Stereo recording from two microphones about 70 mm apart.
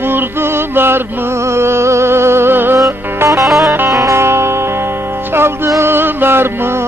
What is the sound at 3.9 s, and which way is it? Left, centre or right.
Music, right.